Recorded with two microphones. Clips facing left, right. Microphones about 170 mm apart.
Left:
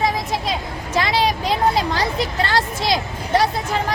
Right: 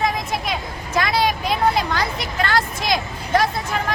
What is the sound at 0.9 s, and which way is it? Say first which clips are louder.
Vehicle: left 1 dB; 30° left (ahead or behind).